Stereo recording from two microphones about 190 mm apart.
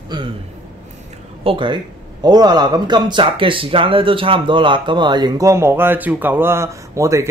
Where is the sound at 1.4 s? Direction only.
25° right (ahead or behind).